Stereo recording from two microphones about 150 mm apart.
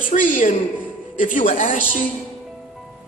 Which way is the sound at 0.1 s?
60° left (ahead or behind).